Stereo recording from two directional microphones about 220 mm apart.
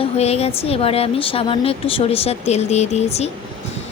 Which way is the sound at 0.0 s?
30° left (ahead or behind).